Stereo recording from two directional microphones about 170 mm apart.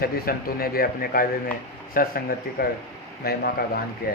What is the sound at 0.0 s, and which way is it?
Speech, 60° left (ahead or behind).